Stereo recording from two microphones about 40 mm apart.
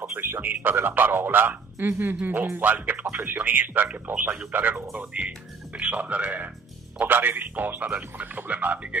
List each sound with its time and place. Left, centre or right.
0.1 s a man's voice: right
4.9 s a man's voice: right
7.0 s speech: right